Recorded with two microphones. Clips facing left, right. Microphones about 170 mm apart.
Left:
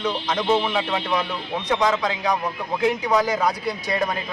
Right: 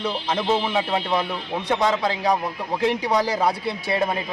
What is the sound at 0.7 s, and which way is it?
A man's voice, 25° right (ahead or behind).